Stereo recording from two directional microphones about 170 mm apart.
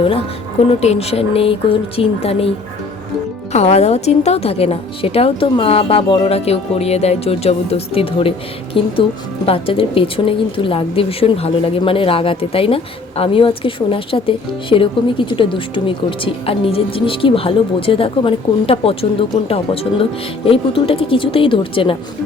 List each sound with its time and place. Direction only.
0.7 s a woman's voice: 40° left (ahead or behind)
3.5 s a woman's voice: 40° left (ahead or behind)